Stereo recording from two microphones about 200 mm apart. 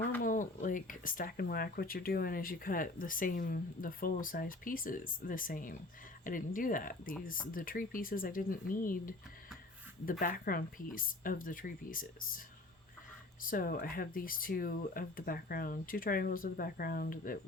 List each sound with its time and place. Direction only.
0.2 s speech: 40° left (ahead or behind)
13.5 s speech: 45° left (ahead or behind)